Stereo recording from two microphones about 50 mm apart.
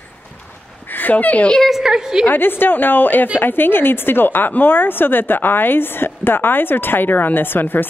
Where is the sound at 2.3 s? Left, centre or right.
Left.